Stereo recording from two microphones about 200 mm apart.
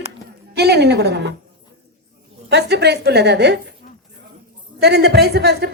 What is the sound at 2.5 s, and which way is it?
A woman's voice, 55° right (ahead or behind).